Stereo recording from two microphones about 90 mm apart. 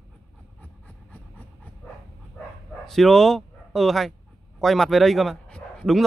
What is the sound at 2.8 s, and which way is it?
Speech, 5° left (ahead or behind).